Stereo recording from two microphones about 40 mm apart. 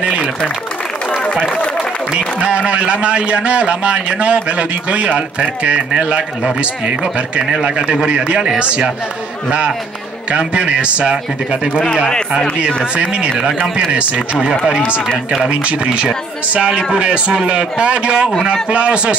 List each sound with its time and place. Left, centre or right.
0.0 s a sound: right
2.4 s a man's voice: right
10.3 s a man's voice: right
12.9 s a man's voice: right
15.5 s a man's voice: right